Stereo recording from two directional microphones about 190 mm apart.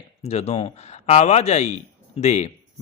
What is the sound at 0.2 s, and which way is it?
Speech, 35° left (ahead or behind).